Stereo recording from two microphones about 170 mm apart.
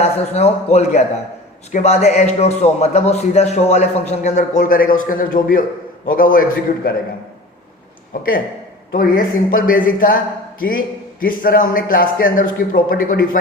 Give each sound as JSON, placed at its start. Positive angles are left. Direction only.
{"t": 0.0, "sound": "a man's voice", "side_deg": 40}
{"t": 8.1, "sound": "a man's voice", "side_deg": 60}